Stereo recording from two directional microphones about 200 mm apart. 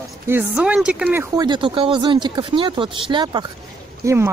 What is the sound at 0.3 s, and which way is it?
Speech, 10° right (ahead or behind).